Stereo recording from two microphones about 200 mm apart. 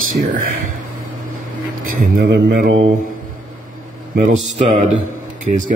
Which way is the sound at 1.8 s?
50° right (ahead or behind).